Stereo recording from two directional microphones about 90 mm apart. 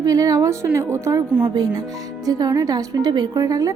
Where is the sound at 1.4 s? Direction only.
45° right (ahead or behind).